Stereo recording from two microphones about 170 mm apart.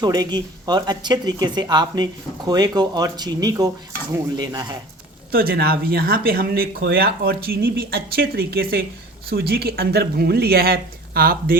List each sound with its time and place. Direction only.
0.0 s speech: 25° right (ahead or behind)
5.3 s speech: 60° right (ahead or behind)